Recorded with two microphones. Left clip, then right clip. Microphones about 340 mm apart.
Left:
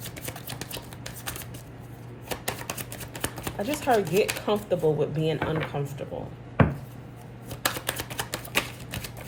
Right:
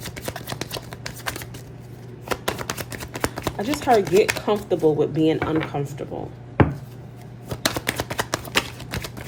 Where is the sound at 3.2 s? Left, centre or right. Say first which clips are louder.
Right 6 dB; right.